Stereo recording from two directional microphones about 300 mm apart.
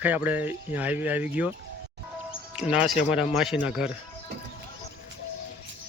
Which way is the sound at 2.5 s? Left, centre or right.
Centre.